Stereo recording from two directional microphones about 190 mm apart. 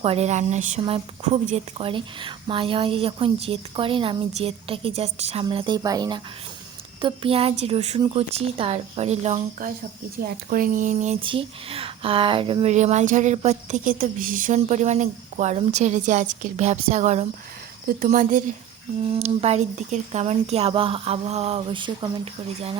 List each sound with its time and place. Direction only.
0.0 s speech: 30° right (ahead or behind)
19.1 s speech: 30° right (ahead or behind)